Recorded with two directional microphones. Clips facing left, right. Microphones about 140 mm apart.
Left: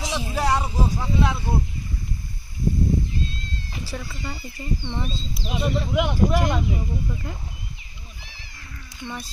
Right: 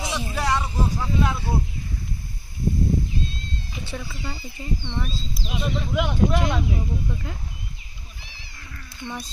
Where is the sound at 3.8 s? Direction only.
Centre (ahead or behind).